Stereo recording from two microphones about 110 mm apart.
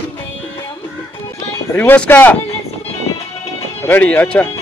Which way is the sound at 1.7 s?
15° left (ahead or behind).